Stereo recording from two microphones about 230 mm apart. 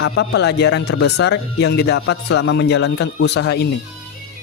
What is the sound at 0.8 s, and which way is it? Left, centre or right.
Speech, left.